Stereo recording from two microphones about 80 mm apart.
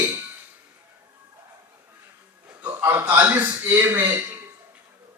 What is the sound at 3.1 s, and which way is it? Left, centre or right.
A man's voice, right.